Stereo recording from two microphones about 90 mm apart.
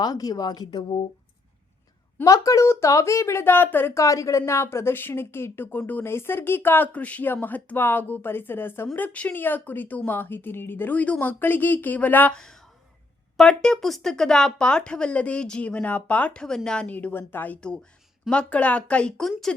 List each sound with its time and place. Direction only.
0.0 s speech: 45° left (ahead or behind)
2.2 s speech: 40° left (ahead or behind); by 3.9 s 25° left (ahead or behind)
3.9 s speech: 35° left (ahead or behind); by 12.4 s 20° left (ahead or behind)
13.3 s speech: 10° left (ahead or behind)